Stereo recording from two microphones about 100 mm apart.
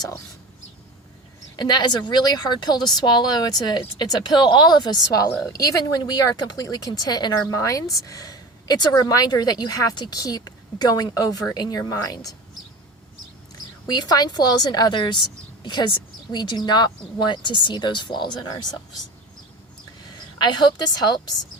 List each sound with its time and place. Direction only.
1.5 s speech: 45° left (ahead or behind)
6.6 s a woman's voice: 40° left (ahead or behind)
13.8 s speech: 45° left (ahead or behind)
20.1 s a woman's voice: 45° left (ahead or behind)